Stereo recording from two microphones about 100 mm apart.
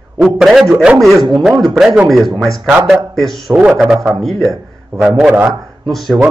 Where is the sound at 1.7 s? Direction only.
Centre (ahead or behind).